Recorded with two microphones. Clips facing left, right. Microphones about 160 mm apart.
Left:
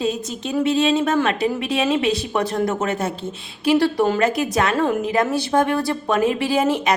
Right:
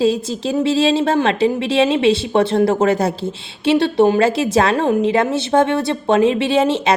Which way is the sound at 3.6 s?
25° right (ahead or behind).